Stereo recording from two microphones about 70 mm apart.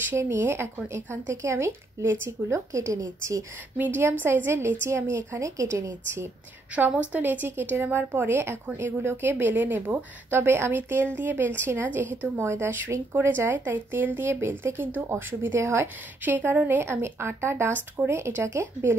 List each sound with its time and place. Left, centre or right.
0.1 s a woman's voice: right
3.7 s a woman's voice: right
6.9 s a woman's voice: right
16.3 s a woman's voice: right